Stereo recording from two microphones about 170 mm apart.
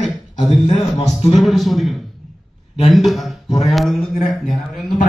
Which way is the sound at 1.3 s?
Centre (ahead or behind).